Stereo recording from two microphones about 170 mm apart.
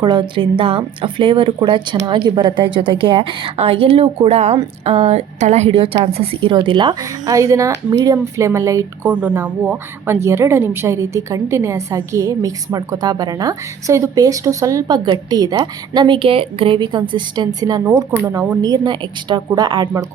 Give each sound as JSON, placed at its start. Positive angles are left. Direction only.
{"t": 0.0, "sound": "a woman's voice", "side_deg": -25}